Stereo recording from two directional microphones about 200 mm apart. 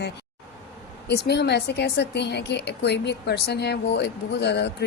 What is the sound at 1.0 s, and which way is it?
A woman's voice, 55° left (ahead or behind).